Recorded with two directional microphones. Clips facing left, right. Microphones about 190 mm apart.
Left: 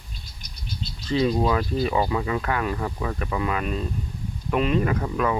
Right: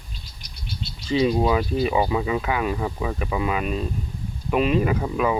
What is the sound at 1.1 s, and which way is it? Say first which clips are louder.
Speech: right 2 dB; 10° right (ahead or behind).